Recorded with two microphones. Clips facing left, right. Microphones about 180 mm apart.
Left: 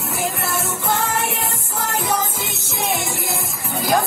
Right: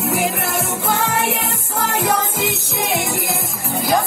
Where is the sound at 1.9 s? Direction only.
75° right (ahead or behind).